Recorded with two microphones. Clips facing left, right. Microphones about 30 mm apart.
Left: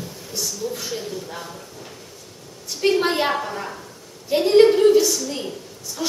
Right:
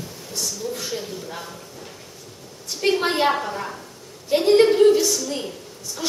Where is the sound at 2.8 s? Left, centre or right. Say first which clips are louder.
Left 1 dB; centre.